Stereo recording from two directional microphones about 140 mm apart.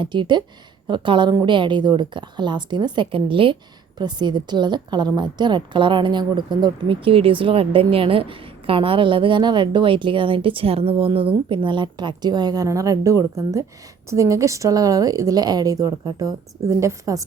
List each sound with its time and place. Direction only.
0.0 s a woman's voice: 35° right (ahead or behind)